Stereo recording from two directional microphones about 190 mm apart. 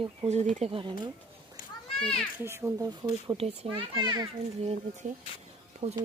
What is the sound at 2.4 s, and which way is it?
Speech, 15° right (ahead or behind).